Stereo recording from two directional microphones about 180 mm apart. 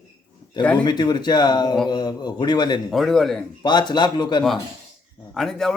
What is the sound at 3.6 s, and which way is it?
Speech, 25° left (ahead or behind).